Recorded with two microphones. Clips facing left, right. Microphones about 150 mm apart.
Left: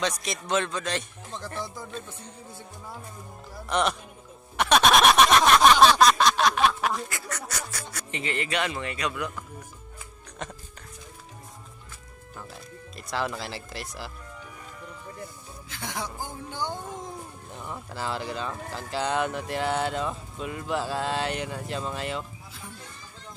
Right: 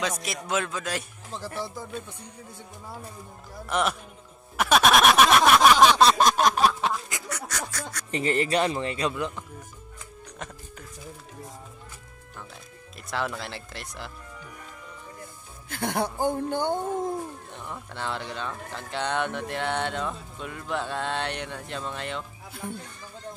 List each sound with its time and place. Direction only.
0.2 s speech: 5° right (ahead or behind)
3.6 s speech: 5° right (ahead or behind)
4.6 s a sound: centre (ahead or behind)
6.1 s a sound: 45° right (ahead or behind)
7.1 s duck: 15° right (ahead or behind)
7.4 s a sound: 10° left (ahead or behind)
8.1 s speech: 40° right (ahead or behind)
12.9 s speech: centre (ahead or behind)
15.7 s speech: 60° right (ahead or behind)
17.6 s speech: 5° left (ahead or behind)